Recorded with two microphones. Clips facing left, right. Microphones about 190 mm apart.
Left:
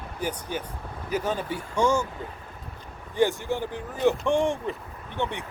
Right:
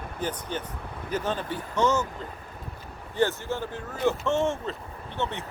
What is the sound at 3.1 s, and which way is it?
Speech, 15° left (ahead or behind).